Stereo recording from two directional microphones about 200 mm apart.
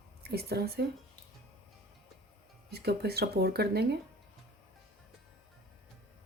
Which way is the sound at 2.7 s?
55° right (ahead or behind).